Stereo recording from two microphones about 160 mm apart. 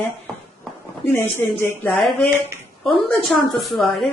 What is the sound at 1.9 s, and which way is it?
A woman's voice, centre (ahead or behind).